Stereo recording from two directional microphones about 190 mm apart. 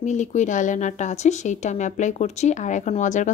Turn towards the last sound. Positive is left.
turn(degrees=40)  # may be behind; listen again after turning